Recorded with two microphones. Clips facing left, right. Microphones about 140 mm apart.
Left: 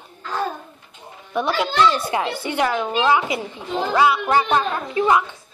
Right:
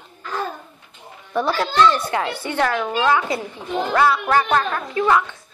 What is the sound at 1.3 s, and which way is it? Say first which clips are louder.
Speech: right 1 dB; 5° left (ahead or behind).